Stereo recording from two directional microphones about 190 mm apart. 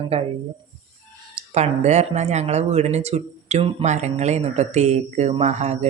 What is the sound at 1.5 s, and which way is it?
Speech, 35° right (ahead or behind).